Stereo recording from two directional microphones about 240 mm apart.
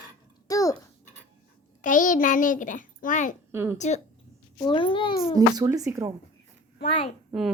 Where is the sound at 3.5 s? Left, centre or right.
Centre.